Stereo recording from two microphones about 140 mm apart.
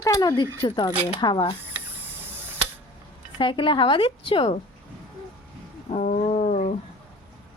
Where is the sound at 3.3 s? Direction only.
35° left (ahead or behind).